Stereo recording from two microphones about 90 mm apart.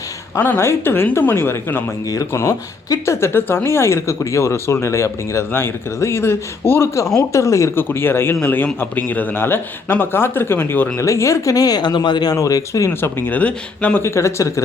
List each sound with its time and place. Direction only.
0.3 s a man's voice: 25° left (ahead or behind)
2.3 s a woman's voice: 35° left (ahead or behind); by 12.4 s 55° left (ahead or behind)
12.4 s a woman's voice: 40° left (ahead or behind)
12.9 s a man's voice: 25° left (ahead or behind)
14.0 s a woman's voice: 30° left (ahead or behind)